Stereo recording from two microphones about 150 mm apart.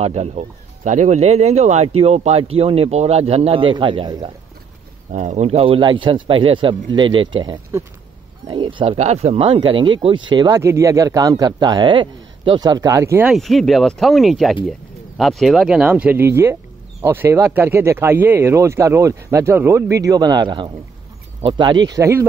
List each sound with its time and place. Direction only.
0.0 s speech: 45° right (ahead or behind); by 4.3 s 30° right (ahead or behind)
5.1 s a man's voice: 55° right (ahead or behind); by 13.3 s 15° right (ahead or behind)
13.3 s speech: centre (ahead or behind); by 22.2 s 20° right (ahead or behind)